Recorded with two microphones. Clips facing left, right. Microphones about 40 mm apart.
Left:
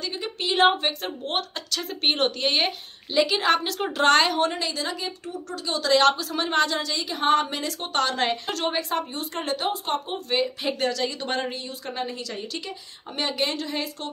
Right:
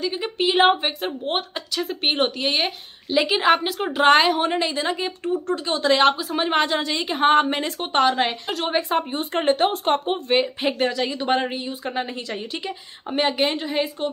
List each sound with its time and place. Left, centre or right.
0.0 s a woman's voice: centre
3.3 s a woman's voice: centre
4.5 s speech: right; by 8.7 s centre
8.7 s speech: right